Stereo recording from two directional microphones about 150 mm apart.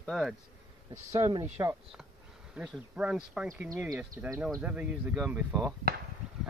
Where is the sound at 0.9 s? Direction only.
20° right (ahead or behind).